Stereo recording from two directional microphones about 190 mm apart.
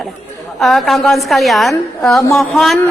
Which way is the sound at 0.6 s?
Centre (ahead or behind).